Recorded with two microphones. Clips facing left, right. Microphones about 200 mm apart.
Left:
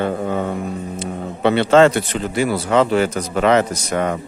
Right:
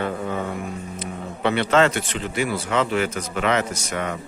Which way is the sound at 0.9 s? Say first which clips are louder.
Left 5 dB; 30° left (ahead or behind).